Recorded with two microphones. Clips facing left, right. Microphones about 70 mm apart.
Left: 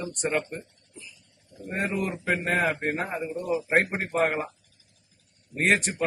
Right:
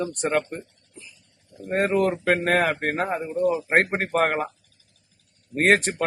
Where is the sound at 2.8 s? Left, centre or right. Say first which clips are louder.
Right 3 dB; right.